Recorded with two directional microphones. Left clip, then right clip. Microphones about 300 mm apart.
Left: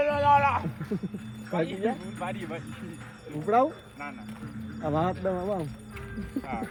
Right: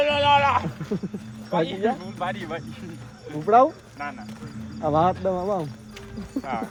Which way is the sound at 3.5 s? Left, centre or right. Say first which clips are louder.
Right 7 dB; centre.